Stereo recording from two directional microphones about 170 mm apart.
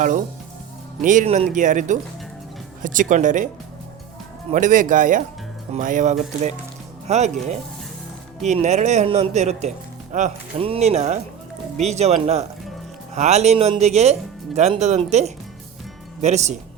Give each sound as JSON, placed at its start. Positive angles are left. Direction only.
{"t": 1.0, "sound": "speech", "side_deg": -45}
{"t": 4.5, "sound": "speech", "side_deg": -50}
{"t": 8.4, "sound": "speech", "side_deg": -40}